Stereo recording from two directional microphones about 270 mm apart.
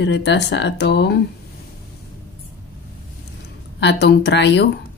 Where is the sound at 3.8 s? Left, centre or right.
Left.